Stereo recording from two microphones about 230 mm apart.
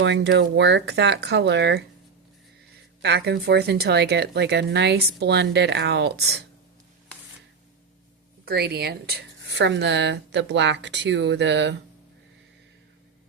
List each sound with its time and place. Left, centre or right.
0.0 s speech: right
3.0 s speech: right
8.4 s speech: right